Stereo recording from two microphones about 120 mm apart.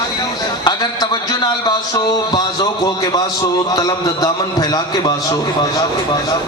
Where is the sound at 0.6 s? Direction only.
35° left (ahead or behind).